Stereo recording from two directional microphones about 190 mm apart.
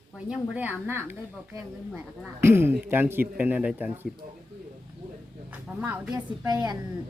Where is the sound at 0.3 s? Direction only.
10° right (ahead or behind).